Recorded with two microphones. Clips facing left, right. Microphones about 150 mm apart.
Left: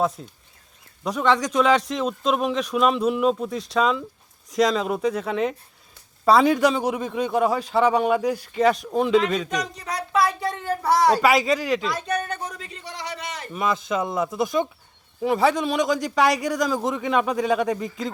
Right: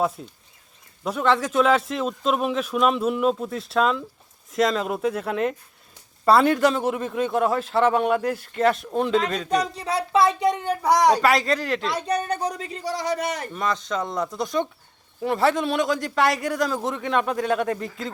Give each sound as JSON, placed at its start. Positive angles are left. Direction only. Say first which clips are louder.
{"t": 0.2, "sound": "a man's voice", "louder": "right 1 dB", "side_deg": -5}
{"t": 9.5, "sound": "speech", "louder": "right 5 dB", "side_deg": -30}
{"t": 11.2, "sound": "a man's voice", "louder": "left 1 dB", "side_deg": 0}
{"t": 11.9, "sound": "a man's voice", "louder": "right 2 dB", "side_deg": -30}
{"t": 13.5, "sound": "a man's voice", "louder": "left 2 dB", "side_deg": 5}